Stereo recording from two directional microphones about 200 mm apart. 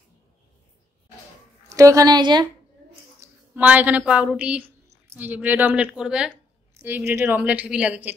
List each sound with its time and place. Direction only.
1.7 s speech: 15° right (ahead or behind)
3.2 s a woman's voice: 10° right (ahead or behind)